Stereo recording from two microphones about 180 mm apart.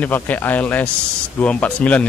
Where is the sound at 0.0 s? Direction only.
10° left (ahead or behind).